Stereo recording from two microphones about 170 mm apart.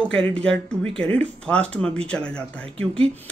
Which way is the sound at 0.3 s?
5° left (ahead or behind).